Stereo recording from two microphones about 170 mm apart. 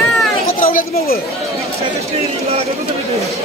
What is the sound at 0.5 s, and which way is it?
Speech, 55° left (ahead or behind).